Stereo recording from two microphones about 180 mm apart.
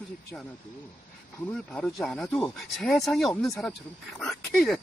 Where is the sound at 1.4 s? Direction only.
5° left (ahead or behind).